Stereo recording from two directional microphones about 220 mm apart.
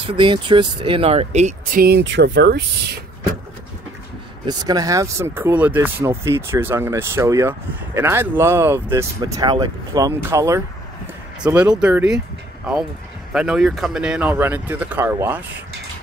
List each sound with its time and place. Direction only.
0.0 s speech: 20° right (ahead or behind); by 3.0 s 50° right (ahead or behind)
4.5 s speech: 15° right (ahead or behind)
13.3 s speech: 5° right (ahead or behind)